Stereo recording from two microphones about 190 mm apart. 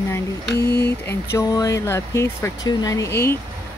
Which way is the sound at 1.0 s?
15° left (ahead or behind).